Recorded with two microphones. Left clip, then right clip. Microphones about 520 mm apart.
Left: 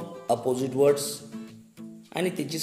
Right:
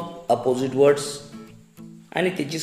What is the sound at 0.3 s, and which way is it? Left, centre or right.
Speech, left.